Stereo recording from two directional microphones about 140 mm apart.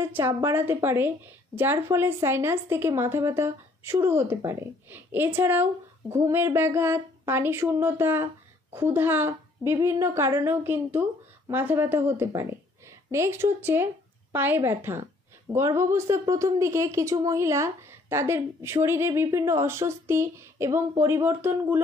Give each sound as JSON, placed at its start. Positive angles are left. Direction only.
{"t": 0.1, "sound": "a woman's voice", "side_deg": -20}